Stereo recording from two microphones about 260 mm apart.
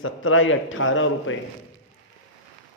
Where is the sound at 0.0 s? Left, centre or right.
Left.